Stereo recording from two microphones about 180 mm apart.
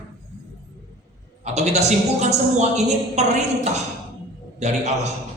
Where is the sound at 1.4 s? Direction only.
40° right (ahead or behind).